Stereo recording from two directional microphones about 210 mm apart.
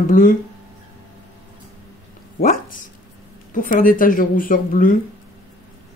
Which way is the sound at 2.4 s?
40° left (ahead or behind).